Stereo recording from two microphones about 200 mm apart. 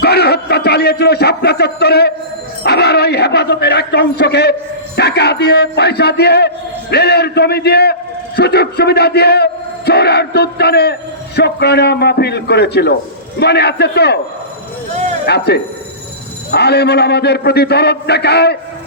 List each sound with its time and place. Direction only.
0.0 s a sound: 55° left (ahead or behind)
4.9 s music: 55° left (ahead or behind)
6.9 s a man's voice: 55° left (ahead or behind)
15.3 s a man's voice: 55° left (ahead or behind)
16.5 s a man's voice: 55° left (ahead or behind)